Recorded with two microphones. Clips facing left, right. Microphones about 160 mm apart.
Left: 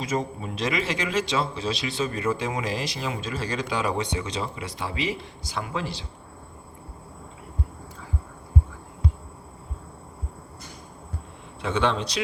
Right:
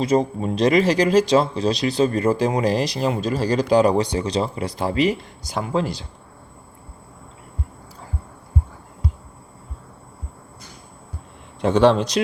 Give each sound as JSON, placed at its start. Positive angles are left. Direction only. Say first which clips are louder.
{"t": 0.0, "sound": "speech", "louder": "right 9 dB", "side_deg": -35}
{"t": 11.6, "sound": "speech", "louder": "right 9 dB", "side_deg": -40}
{"t": 12.2, "sound": "speech", "louder": "right 8 dB", "side_deg": -50}